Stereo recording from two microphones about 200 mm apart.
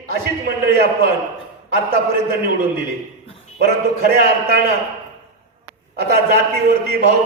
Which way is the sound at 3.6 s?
50° right (ahead or behind).